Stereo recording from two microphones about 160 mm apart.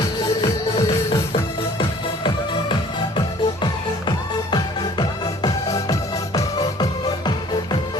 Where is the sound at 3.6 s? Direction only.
30° left (ahead or behind).